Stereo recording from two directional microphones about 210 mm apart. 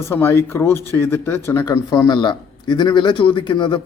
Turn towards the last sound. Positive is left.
turn(degrees=25)  # may be behind; listen again after turning